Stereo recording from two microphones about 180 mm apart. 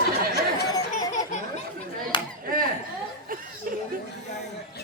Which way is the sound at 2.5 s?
50° right (ahead or behind).